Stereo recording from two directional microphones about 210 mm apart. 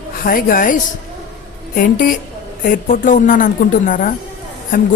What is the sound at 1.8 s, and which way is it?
Speech, 40° left (ahead or behind).